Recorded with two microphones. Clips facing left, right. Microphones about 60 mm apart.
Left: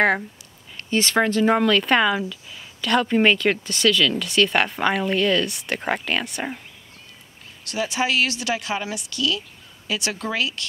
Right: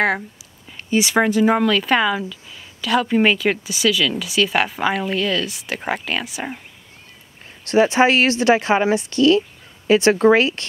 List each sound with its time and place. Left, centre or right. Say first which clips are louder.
0.8 s a woman's voice: right 3 dB; centre
7.6 s speech: right 10 dB; right